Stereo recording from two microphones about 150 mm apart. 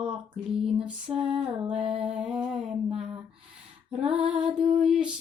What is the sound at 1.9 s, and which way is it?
Music, 40° right (ahead or behind).